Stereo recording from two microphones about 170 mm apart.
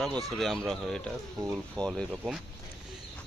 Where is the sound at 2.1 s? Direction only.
5° right (ahead or behind).